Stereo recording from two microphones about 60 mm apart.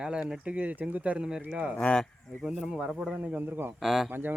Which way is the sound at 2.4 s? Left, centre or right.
Centre.